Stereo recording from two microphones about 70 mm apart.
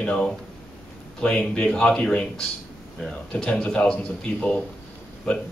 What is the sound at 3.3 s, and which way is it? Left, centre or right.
A man's voice, centre.